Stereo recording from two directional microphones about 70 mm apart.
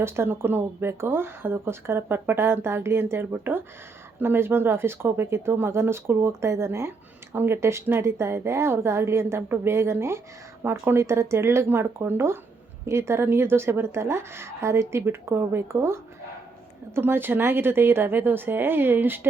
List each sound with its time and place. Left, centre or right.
0.0 s speech: right